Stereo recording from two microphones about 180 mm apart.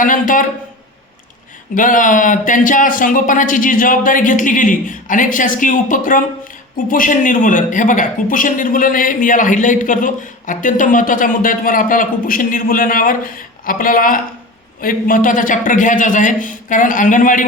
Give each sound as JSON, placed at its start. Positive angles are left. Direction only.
{"t": 0.0, "sound": "speech", "side_deg": 50}
{"t": 1.7, "sound": "speech", "side_deg": 50}